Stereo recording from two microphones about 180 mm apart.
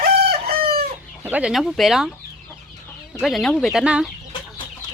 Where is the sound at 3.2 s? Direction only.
Centre (ahead or behind).